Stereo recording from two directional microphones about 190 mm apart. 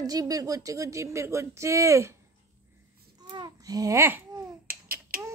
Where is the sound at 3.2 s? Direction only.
20° right (ahead or behind).